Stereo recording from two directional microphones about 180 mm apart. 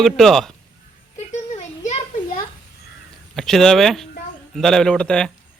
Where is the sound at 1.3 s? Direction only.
40° left (ahead or behind).